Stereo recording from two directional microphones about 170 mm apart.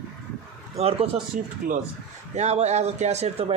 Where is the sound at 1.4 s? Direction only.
50° right (ahead or behind).